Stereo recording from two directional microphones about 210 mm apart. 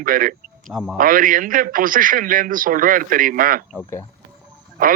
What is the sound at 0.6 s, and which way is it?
Speech, centre (ahead or behind).